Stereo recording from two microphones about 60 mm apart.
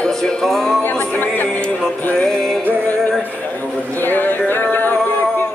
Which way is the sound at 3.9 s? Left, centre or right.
Left.